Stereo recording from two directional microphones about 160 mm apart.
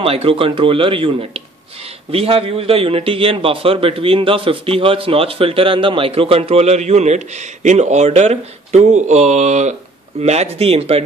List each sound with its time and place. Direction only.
0.0 s speech: 35° right (ahead or behind)